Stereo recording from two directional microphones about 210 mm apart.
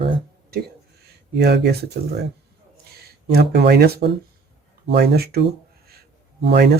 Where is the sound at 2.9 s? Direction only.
50° right (ahead or behind).